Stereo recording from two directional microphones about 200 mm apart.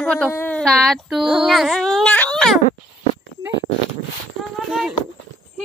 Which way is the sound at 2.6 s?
30° left (ahead or behind).